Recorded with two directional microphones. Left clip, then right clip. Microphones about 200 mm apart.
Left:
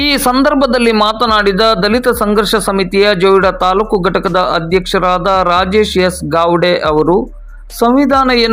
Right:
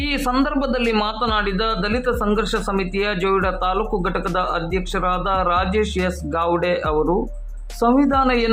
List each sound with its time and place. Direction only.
0.4 s speech: 35° left (ahead or behind)